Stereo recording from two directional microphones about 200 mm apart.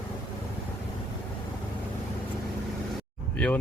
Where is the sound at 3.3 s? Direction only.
5° left (ahead or behind).